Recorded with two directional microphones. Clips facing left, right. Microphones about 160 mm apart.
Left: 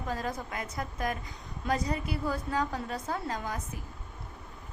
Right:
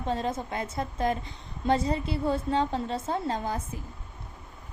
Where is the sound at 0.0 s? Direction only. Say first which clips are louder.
Right 5 dB; 25° right (ahead or behind).